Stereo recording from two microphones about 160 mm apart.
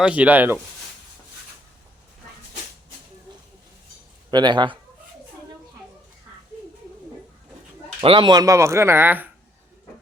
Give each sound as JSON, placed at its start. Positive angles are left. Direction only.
{"t": 0.0, "sound": "speech", "side_deg": -10}
{"t": 4.3, "sound": "speech", "side_deg": -25}
{"t": 8.0, "sound": "speech", "side_deg": -30}